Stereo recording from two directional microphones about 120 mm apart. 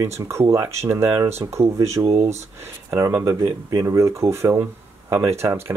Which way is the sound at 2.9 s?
25° right (ahead or behind).